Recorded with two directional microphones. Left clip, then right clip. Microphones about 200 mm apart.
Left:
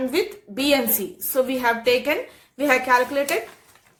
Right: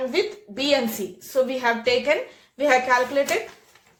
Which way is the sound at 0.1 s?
30° left (ahead or behind).